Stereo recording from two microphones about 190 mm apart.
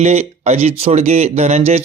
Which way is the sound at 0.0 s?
35° right (ahead or behind).